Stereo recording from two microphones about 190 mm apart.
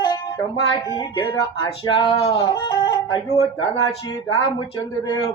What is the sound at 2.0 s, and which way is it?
Music, 20° left (ahead or behind).